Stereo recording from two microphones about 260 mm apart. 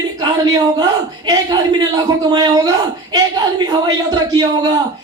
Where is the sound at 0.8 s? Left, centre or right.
Centre.